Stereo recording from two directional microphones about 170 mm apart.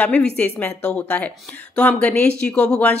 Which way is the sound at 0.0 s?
10° left (ahead or behind).